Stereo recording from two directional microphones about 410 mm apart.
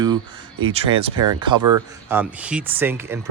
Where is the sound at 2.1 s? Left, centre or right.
Centre.